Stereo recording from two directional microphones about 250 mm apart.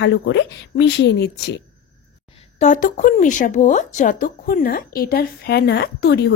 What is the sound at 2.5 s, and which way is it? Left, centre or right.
A woman's voice, left.